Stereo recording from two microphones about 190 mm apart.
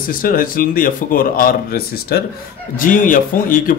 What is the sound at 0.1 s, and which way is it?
Speech, 50° left (ahead or behind).